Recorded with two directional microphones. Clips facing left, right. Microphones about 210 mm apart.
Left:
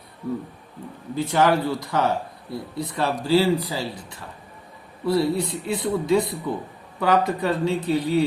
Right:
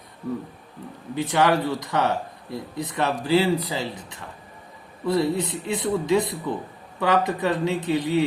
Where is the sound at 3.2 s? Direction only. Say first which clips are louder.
Left 2 dB; 20° right (ahead or behind).